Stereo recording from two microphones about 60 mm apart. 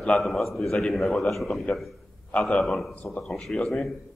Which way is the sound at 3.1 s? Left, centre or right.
Centre.